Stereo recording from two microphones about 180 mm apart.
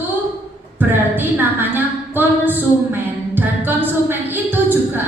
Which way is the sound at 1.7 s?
10° right (ahead or behind).